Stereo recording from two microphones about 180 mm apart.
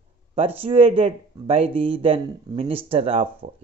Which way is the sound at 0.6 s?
30° right (ahead or behind).